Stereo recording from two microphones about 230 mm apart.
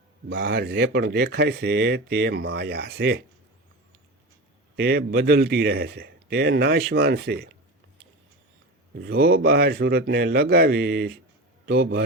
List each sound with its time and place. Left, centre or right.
0.3 s speech: right
4.8 s speech: right
9.0 s a man's voice: right